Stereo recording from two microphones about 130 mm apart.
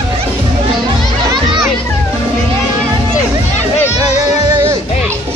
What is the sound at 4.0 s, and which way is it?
Music, 30° right (ahead or behind).